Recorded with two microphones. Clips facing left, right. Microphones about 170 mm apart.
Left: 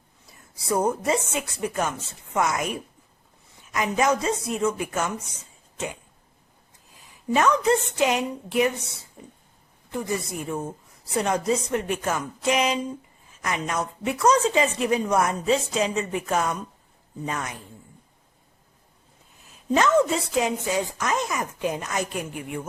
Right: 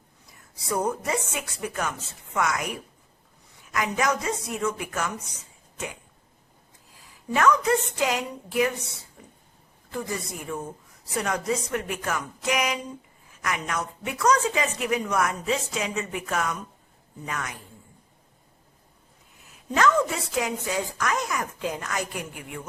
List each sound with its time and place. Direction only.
0.5 s speech: 30° left (ahead or behind)
7.0 s speech: 20° left (ahead or behind)
19.7 s speech: 25° left (ahead or behind)